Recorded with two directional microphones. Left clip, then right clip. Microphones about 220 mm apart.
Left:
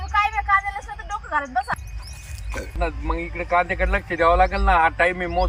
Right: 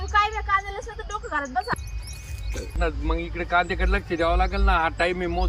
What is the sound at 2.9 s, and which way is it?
Speech, 35° left (ahead or behind).